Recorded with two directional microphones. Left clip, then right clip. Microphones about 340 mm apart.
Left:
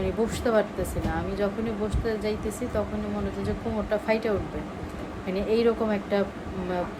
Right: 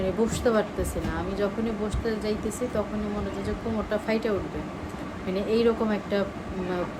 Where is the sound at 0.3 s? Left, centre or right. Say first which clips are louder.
Left 2 dB; centre.